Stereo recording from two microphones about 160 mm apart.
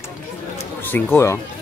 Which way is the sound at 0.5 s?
15° left (ahead or behind).